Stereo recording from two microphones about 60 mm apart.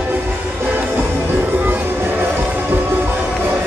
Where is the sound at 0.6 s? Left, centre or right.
Right.